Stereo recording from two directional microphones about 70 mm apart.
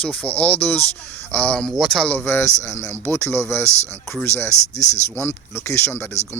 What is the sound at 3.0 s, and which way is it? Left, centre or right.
Speech, left.